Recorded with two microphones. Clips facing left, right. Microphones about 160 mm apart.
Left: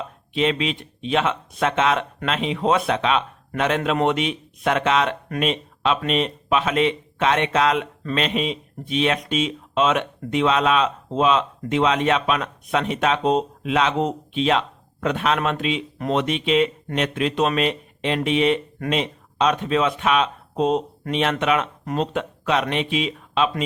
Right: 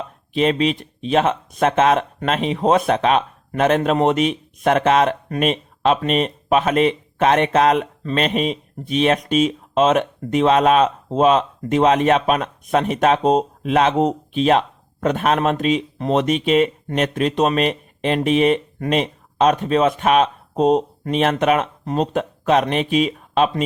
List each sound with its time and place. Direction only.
0.3 s speech: 45° right (ahead or behind)